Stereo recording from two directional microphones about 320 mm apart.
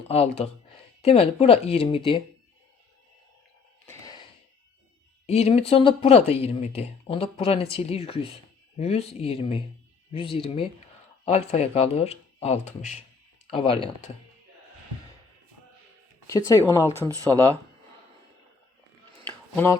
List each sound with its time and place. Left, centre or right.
0.1 s a man's voice: centre
3.8 s a sound: centre
5.2 s a man's voice: centre
16.2 s speech: centre
19.5 s speech: centre